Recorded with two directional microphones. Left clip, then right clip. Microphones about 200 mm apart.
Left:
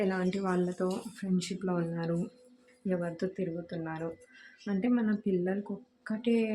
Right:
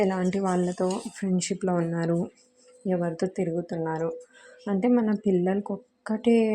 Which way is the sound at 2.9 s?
20° right (ahead or behind).